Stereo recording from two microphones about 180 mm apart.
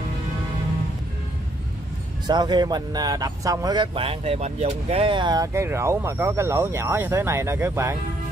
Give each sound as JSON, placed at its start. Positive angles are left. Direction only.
{"t": 2.2, "sound": "speech", "side_deg": -25}